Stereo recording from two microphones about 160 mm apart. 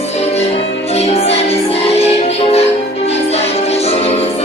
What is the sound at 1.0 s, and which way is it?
Music, 40° left (ahead or behind).